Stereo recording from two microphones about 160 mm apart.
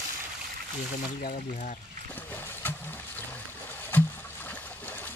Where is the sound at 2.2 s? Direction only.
10° left (ahead or behind).